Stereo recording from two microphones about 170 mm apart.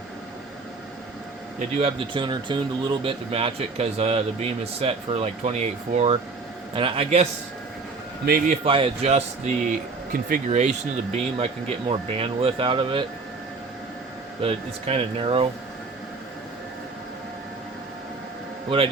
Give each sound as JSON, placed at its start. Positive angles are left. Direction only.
{"t": 1.5, "sound": "speech", "side_deg": -35}
{"t": 8.6, "sound": "speech", "side_deg": -30}
{"t": 10.1, "sound": "speech", "side_deg": -55}
{"t": 10.6, "sound": "speech", "side_deg": -40}
{"t": 14.4, "sound": "speech", "side_deg": -35}
{"t": 18.7, "sound": "speech", "side_deg": -30}